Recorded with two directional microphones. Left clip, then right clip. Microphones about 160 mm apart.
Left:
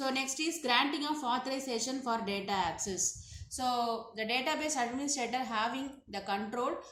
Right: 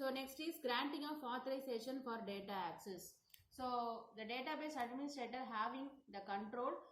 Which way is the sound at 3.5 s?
60° left (ahead or behind).